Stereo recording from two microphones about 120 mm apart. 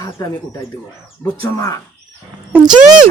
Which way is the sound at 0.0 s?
30° left (ahead or behind).